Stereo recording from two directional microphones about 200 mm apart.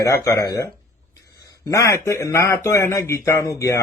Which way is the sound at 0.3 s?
20° left (ahead or behind).